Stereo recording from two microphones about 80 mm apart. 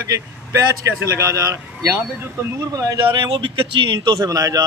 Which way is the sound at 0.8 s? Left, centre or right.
Right.